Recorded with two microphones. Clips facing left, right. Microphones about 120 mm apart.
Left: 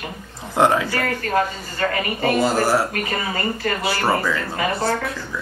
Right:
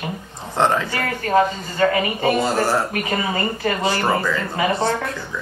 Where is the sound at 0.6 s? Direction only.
10° left (ahead or behind).